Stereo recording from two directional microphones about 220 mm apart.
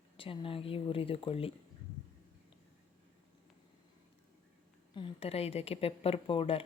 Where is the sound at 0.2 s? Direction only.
25° left (ahead or behind).